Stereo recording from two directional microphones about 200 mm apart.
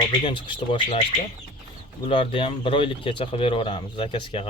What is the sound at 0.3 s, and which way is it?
Speech, 25° left (ahead or behind).